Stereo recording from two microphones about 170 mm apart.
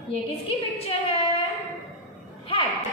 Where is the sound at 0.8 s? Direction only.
35° left (ahead or behind).